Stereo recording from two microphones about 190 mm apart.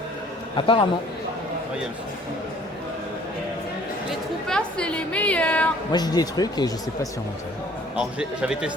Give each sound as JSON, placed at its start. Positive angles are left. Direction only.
{"t": 0.5, "sound": "speech", "side_deg": 25}
{"t": 4.4, "sound": "a woman's voice", "side_deg": 5}
{"t": 5.9, "sound": "speech", "side_deg": 20}
{"t": 7.9, "sound": "a man's voice", "side_deg": -5}